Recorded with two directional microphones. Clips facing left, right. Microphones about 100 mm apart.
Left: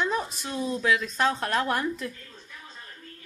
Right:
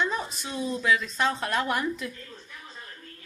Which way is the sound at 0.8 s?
50° left (ahead or behind).